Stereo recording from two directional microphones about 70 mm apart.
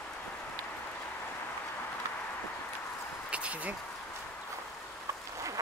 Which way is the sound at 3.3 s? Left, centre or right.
Centre.